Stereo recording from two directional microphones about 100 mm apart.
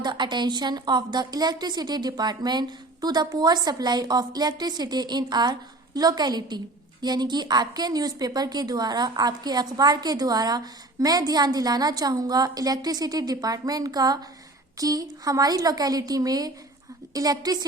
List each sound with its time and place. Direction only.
0.0 s a woman's voice: 45° right (ahead or behind)